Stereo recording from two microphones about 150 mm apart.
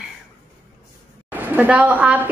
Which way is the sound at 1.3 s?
10° right (ahead or behind).